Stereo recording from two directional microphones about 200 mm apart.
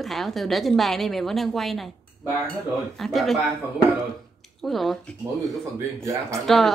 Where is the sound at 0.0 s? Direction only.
Centre (ahead or behind).